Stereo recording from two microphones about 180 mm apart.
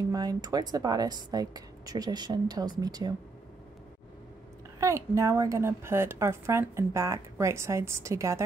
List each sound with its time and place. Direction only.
0.1 s a woman's voice: 20° right (ahead or behind)
4.7 s a woman's voice: 15° right (ahead or behind)